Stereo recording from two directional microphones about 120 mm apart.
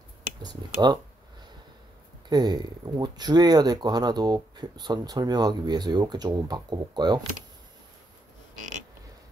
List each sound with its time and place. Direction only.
0.4 s speech: 35° right (ahead or behind)
2.2 s speech: 35° right (ahead or behind)
8.5 s a sound: 90° right